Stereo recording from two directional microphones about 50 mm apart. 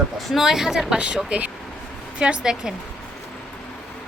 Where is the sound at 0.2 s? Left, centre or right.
Centre.